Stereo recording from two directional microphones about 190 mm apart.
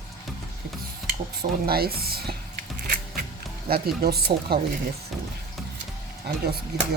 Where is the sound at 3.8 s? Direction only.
55° right (ahead or behind).